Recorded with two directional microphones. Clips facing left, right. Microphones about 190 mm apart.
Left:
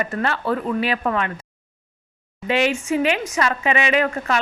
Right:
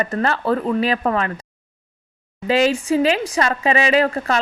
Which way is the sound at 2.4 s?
35° right (ahead or behind).